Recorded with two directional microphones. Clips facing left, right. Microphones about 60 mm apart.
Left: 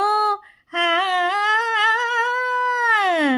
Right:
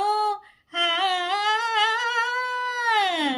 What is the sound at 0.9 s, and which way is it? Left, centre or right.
Humming, left.